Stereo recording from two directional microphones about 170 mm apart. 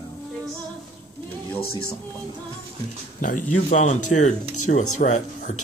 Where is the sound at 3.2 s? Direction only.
50° left (ahead or behind).